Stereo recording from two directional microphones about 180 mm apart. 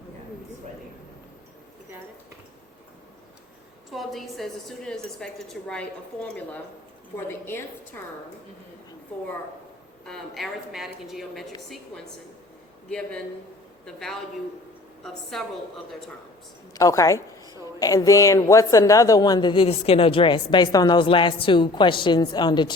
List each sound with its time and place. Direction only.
3.9 s a woman's voice: centre (ahead or behind)
10.1 s a woman's voice: centre (ahead or behind)
12.9 s a woman's voice: 5° left (ahead or behind)
16.7 s a woman's voice: 20° left (ahead or behind)